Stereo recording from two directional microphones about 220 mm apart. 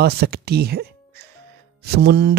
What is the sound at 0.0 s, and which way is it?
Speech, 45° right (ahead or behind).